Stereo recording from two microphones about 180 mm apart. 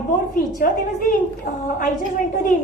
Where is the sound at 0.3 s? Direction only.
50° left (ahead or behind).